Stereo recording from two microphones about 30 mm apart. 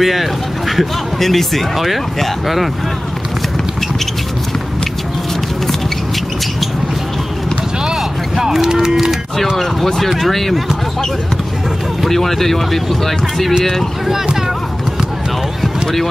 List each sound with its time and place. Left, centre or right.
0.0 s speech: centre
7.8 s a sound: centre
10.1 s speech: centre
12.1 s speech: centre
14.0 s speech: centre
15.6 s clip-clop: centre